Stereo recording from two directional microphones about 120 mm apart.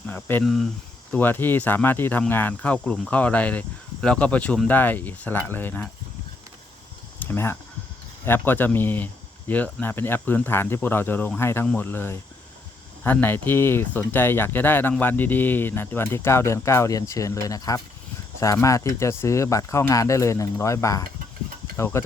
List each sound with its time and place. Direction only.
0.1 s speech: 15° left (ahead or behind)
0.4 s speech: centre (ahead or behind)
1.1 s speech: 15° left (ahead or behind)
7.2 s speech: 20° left (ahead or behind)